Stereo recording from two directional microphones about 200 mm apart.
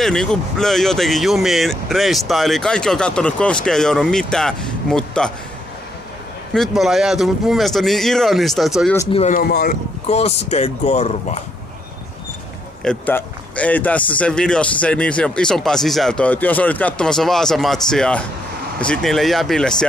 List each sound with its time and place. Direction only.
0.0 s speech: centre (ahead or behind)
6.5 s speech: centre (ahead or behind)
9.0 s speech: 35° left (ahead or behind)
9.4 s speech: 50° left (ahead or behind)
10.0 s speech: 30° left (ahead or behind)
12.8 s speech: 5° left (ahead or behind)